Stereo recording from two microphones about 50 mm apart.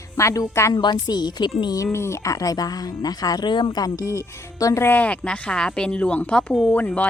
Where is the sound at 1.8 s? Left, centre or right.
Left.